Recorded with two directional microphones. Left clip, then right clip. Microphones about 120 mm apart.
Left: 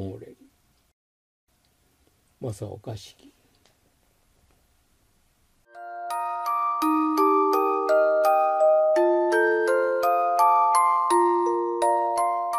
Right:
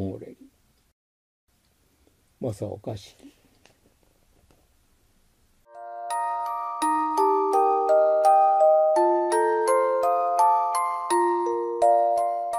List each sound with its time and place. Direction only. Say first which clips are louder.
2.8 s speech: right 3 dB; 20° right (ahead or behind)
5.7 s music: even; centre (ahead or behind)